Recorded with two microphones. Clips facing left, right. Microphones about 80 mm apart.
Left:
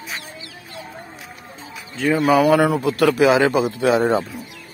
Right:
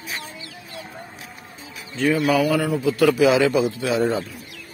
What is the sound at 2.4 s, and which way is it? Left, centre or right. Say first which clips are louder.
A man's voice: left 5 dB; left.